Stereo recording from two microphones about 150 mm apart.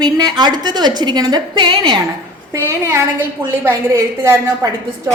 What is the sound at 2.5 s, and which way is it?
A woman's voice, 20° right (ahead or behind).